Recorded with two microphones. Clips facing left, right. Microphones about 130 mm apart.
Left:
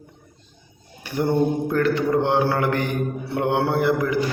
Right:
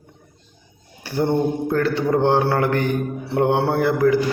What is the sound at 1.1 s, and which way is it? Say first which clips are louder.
A man's voice: right 1 dB; 30° right (ahead or behind).